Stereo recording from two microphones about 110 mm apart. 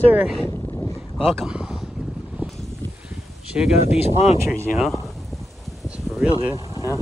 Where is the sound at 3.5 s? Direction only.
5° right (ahead or behind).